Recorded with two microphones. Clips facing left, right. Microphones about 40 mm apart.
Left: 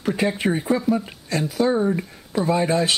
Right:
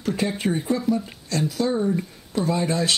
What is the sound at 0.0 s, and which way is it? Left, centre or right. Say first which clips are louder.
Speech: left 3 dB; centre.